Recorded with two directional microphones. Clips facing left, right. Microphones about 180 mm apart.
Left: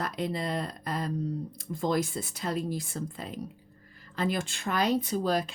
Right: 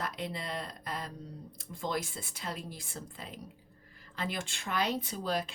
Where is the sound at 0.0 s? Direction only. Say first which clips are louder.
Left 6 dB; 40° left (ahead or behind).